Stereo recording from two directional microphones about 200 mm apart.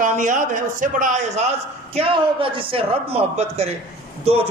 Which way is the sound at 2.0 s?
25° right (ahead or behind).